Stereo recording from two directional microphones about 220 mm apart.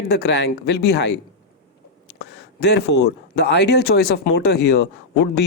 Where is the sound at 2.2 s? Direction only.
50° left (ahead or behind).